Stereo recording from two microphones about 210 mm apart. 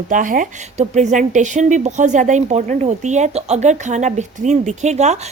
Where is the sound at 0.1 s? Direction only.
40° right (ahead or behind).